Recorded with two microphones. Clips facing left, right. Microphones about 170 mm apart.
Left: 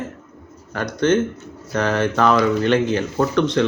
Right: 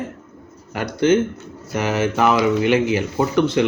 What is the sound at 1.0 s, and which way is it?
Speech, 10° right (ahead or behind).